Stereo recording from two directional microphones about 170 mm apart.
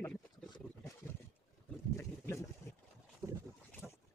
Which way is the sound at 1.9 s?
15° left (ahead or behind).